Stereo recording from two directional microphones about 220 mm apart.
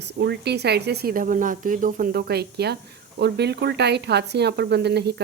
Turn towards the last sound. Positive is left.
turn(degrees=-50)  # may be behind; listen again after turning